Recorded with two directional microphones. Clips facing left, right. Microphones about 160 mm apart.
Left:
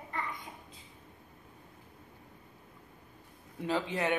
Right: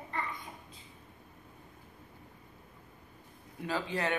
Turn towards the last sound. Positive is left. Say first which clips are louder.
# left 2 dB
turn(degrees=20)  # may be behind; listen again after turning